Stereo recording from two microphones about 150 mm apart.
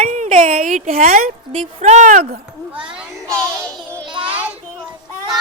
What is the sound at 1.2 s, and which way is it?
Speech, 50° right (ahead or behind).